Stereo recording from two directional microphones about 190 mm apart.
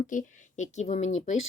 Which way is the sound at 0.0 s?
45° left (ahead or behind).